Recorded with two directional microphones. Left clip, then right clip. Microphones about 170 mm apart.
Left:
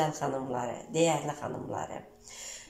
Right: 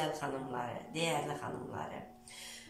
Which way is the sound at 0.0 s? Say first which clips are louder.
Left 6 dB; 45° left (ahead or behind).